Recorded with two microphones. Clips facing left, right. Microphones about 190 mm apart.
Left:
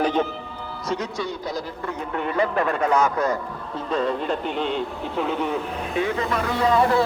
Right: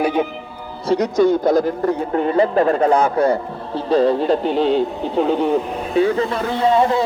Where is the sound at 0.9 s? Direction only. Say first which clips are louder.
Right 13 dB; 40° right (ahead or behind).